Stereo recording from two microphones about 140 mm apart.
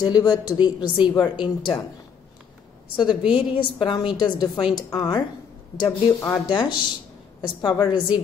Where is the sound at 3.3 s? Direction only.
35° left (ahead or behind).